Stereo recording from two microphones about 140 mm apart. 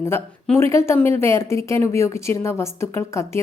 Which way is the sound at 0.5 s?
20° left (ahead or behind).